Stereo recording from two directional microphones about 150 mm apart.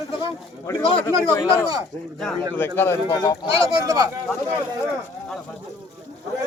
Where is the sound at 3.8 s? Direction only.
20° right (ahead or behind).